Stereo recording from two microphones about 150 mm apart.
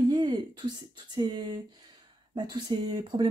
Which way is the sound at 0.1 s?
30° right (ahead or behind).